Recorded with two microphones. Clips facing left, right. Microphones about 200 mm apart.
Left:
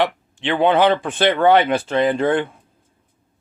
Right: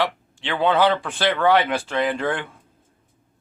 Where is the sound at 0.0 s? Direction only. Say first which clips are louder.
Left 4 dB; 20° left (ahead or behind).